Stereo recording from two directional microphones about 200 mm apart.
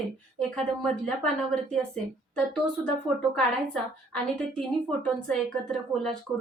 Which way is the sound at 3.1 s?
20° right (ahead or behind).